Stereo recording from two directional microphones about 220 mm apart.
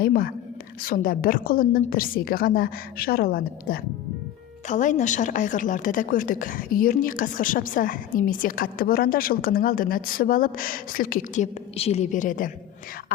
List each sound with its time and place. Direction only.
0.0 s a woman's voice: 40° left (ahead or behind)